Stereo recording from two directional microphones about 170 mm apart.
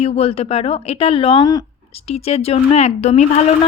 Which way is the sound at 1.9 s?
35° left (ahead or behind).